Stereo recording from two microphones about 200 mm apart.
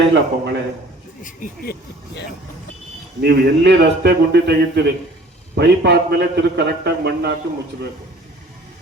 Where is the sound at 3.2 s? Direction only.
55° right (ahead or behind).